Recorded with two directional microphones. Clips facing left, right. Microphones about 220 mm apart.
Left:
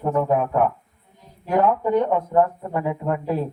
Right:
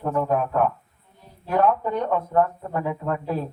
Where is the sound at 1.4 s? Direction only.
15° left (ahead or behind).